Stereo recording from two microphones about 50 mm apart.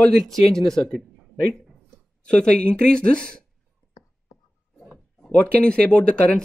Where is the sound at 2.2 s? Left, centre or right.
Left.